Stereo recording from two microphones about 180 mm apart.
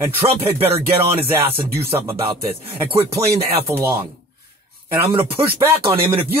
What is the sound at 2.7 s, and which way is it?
Speech, 35° right (ahead or behind).